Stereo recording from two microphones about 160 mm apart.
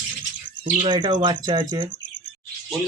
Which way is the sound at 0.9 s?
25° right (ahead or behind).